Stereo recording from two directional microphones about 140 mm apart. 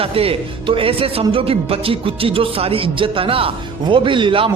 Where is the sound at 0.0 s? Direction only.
40° right (ahead or behind).